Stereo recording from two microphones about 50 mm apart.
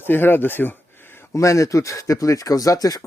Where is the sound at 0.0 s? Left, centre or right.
Left.